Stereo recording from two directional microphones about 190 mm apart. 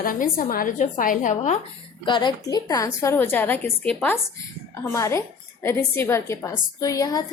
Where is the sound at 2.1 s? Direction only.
25° left (ahead or behind).